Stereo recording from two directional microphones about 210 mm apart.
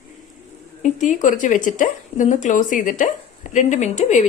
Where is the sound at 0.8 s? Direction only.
35° left (ahead or behind).